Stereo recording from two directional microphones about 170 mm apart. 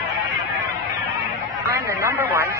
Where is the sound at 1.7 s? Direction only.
10° right (ahead or behind).